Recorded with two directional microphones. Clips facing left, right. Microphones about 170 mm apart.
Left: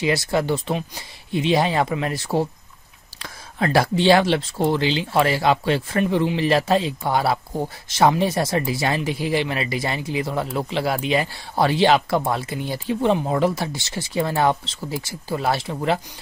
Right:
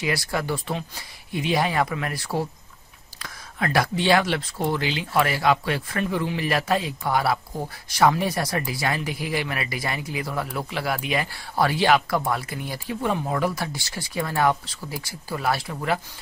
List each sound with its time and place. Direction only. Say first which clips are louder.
0.0 s speech: left 5 dB; 25° left (ahead or behind)